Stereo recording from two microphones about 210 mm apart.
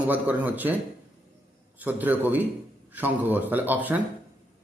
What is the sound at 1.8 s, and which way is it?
A man's voice, 10° right (ahead or behind).